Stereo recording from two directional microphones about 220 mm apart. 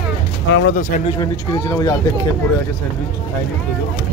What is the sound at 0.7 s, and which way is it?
Speech, 40° left (ahead or behind).